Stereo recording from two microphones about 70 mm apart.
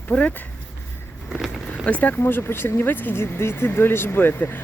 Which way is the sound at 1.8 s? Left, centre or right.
Left.